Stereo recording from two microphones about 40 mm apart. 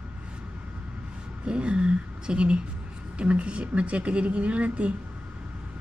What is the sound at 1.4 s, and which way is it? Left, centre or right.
A woman's voice, right.